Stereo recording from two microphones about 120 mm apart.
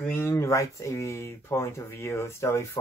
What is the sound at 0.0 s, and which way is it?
Speech, 15° left (ahead or behind).